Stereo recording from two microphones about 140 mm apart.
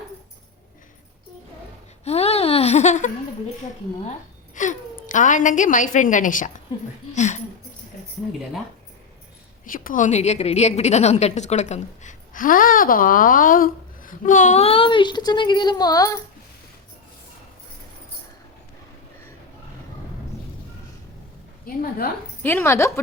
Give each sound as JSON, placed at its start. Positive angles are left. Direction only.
{"t": 2.0, "sound": "baby laughter", "side_deg": 45}
{"t": 4.5, "sound": "a woman's voice", "side_deg": 65}
{"t": 9.6, "sound": "a woman's voice", "side_deg": 80}
{"t": 21.8, "sound": "a woman's voice", "side_deg": 90}
{"t": 22.4, "sound": "a woman's voice", "side_deg": 15}